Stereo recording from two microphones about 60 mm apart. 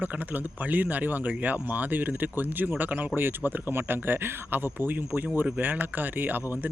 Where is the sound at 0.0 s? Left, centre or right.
Right.